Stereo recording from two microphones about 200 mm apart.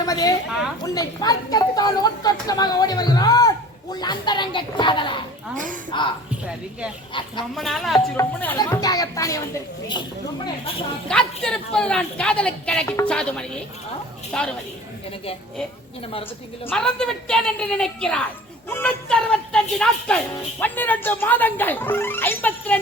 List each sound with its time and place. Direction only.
0.0 s a sound: 20° left (ahead or behind)
0.9 s a woman's voice: 20° left (ahead or behind)
7.1 s a woman's voice: 25° left (ahead or behind)
7.5 s speech: centre (ahead or behind)
7.9 s speech: 15° left (ahead or behind)
11.1 s speech: 5° left (ahead or behind)
16.6 s speech: 5° left (ahead or behind)